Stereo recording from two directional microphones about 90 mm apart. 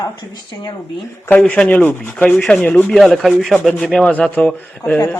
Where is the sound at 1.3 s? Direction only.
10° left (ahead or behind).